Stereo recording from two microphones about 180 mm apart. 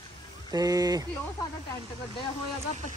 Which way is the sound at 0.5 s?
20° right (ahead or behind).